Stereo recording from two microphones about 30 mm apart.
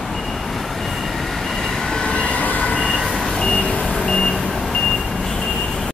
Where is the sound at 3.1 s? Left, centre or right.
Centre.